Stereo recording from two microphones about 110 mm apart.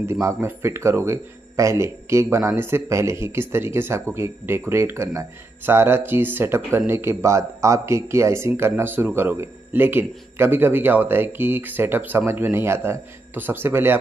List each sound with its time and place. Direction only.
0.0 s speech: 25° right (ahead or behind)